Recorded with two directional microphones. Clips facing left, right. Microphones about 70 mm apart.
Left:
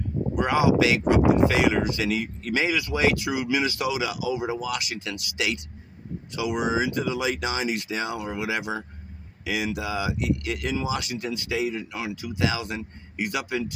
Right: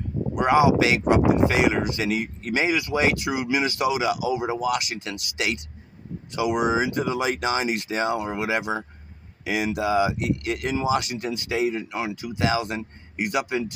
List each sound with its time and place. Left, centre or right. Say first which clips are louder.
0.3 s speech: right 3 dB; right